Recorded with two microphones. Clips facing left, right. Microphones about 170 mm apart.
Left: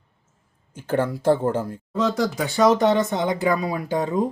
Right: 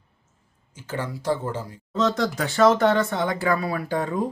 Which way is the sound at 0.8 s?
55° left (ahead or behind).